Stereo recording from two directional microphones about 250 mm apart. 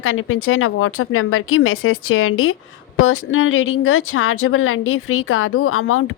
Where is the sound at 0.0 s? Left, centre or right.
Left.